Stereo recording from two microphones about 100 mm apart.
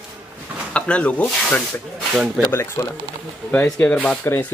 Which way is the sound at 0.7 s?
10° left (ahead or behind).